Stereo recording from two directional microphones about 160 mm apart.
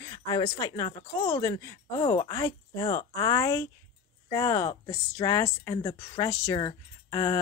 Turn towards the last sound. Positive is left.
turn(degrees=25)  # may be behind; listen again after turning